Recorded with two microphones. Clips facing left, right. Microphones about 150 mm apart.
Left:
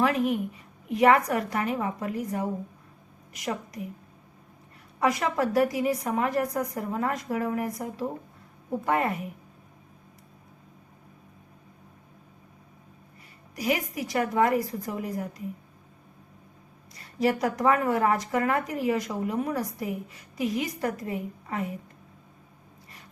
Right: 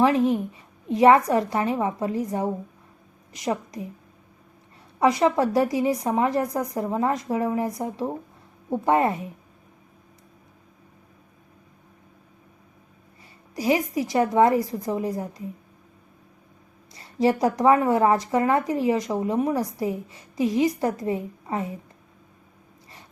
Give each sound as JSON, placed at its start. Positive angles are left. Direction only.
{"t": 0.0, "sound": "a woman's voice", "side_deg": -25}
{"t": 4.9, "sound": "a woman's voice", "side_deg": -25}
{"t": 13.6, "sound": "a woman's voice", "side_deg": -30}
{"t": 16.9, "sound": "a woman's voice", "side_deg": -25}